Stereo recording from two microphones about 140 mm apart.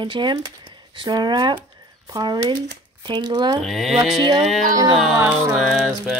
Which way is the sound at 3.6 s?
Centre (ahead or behind).